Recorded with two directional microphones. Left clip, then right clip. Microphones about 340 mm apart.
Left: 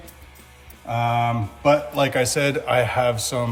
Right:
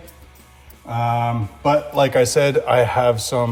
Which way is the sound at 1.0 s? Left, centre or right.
Centre.